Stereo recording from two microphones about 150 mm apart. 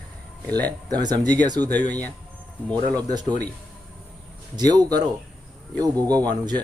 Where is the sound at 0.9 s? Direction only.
25° right (ahead or behind).